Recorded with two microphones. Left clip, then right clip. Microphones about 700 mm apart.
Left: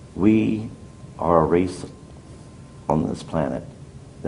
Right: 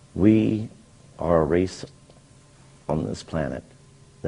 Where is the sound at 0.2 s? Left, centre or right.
Right.